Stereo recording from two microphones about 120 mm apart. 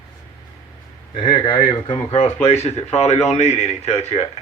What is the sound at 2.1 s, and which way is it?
Speech, 60° left (ahead or behind).